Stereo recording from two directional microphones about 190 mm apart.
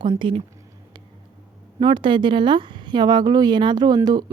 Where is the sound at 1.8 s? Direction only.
25° right (ahead or behind).